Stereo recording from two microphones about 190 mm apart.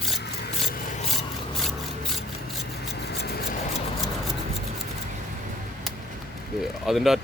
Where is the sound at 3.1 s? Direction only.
55° left (ahead or behind).